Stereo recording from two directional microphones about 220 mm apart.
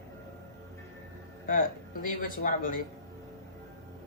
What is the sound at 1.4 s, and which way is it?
Speech, 40° left (ahead or behind).